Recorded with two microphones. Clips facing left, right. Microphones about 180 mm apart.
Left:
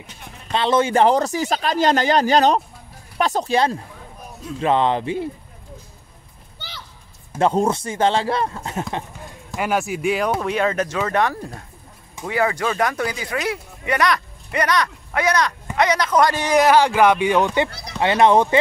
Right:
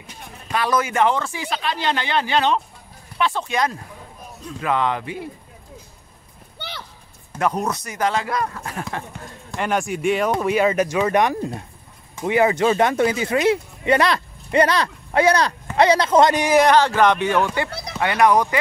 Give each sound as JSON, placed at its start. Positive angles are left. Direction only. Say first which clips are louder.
{"t": 0.5, "sound": "speech", "louder": "left 3 dB", "side_deg": 25}
{"t": 7.3, "sound": "speech", "louder": "left 4 dB", "side_deg": 25}
{"t": 9.5, "sound": "speech", "louder": "left 1 dB", "side_deg": 5}
{"t": 16.4, "sound": "speech", "louder": "even", "side_deg": 0}
{"t": 16.7, "sound": "speech", "louder": "left 1 dB", "side_deg": 10}